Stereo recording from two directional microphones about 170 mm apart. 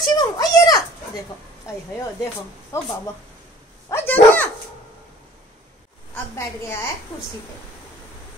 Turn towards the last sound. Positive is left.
turn(degrees=15)  # may be behind; listen again after turning